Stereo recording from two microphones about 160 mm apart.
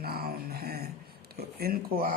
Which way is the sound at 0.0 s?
70° right (ahead or behind).